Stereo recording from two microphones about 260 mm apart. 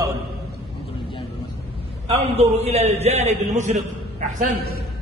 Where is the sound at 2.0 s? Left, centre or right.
Right.